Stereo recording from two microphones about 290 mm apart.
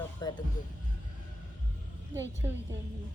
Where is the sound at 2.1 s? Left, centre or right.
Centre.